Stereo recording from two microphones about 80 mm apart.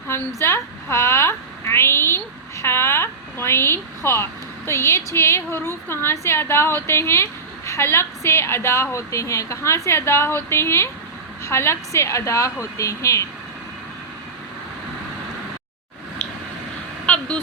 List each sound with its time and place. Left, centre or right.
0.1 s a woman's voice: left
17.1 s vehicle: centre